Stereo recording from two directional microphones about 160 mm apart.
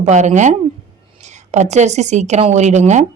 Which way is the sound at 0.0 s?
45° right (ahead or behind).